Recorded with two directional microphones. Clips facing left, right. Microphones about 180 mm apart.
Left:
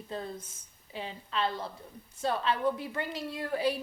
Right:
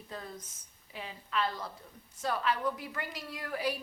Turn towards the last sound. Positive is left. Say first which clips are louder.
# left 5 dB
turn(degrees=25)  # may be behind; listen again after turning